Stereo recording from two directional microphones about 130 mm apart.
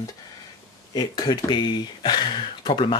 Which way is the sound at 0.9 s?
30° left (ahead or behind).